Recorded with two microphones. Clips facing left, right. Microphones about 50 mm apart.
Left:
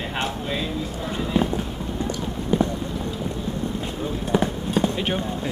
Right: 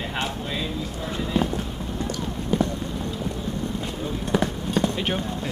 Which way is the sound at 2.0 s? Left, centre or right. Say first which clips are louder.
Left 1 dB; centre.